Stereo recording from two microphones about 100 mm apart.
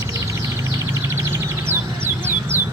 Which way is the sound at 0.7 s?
25° right (ahead or behind).